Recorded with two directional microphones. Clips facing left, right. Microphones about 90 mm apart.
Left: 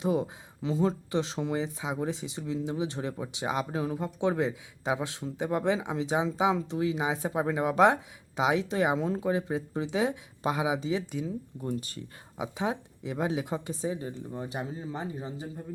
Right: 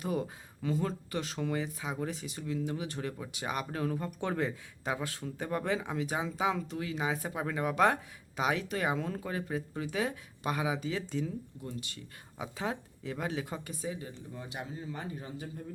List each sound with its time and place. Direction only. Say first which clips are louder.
0.0 s speech: left 6 dB; 20° left (ahead or behind)
12.4 s speech: left 5 dB; 20° left (ahead or behind)